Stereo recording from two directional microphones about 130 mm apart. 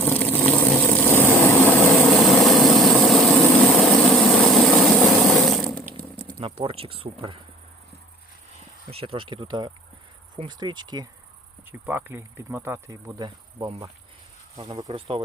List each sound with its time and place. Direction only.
0.0 s vehicle: 15° left (ahead or behind)
2.0 s vehicle: centre (ahead or behind)
5.3 s ratchet: centre (ahead or behind)
6.4 s speech: 45° right (ahead or behind)
8.9 s speech: 45° right (ahead or behind)
11.7 s speech: 15° right (ahead or behind)
13.1 s insect: 30° right (ahead or behind)
14.6 s speech: 35° right (ahead or behind)